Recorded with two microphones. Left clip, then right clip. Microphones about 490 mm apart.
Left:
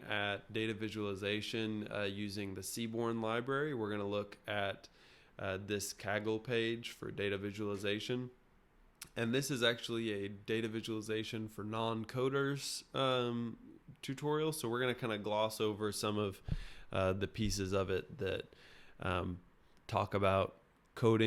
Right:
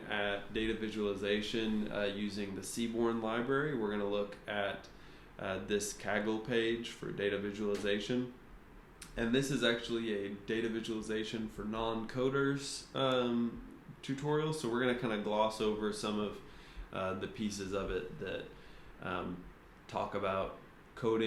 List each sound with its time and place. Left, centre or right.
0.1 s speech: left